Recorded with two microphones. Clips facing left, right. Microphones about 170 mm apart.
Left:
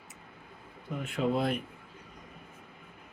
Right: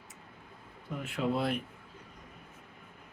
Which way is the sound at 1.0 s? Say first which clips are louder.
Left 2 dB; 5° right (ahead or behind).